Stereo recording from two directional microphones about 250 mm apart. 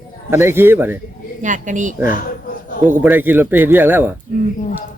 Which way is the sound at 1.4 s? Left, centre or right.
Right.